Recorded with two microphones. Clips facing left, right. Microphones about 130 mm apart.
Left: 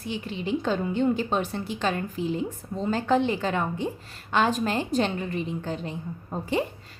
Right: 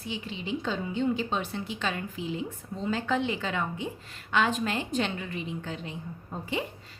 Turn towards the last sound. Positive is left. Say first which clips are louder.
# left 6 dB
turn(degrees=40)  # may be behind; listen again after turning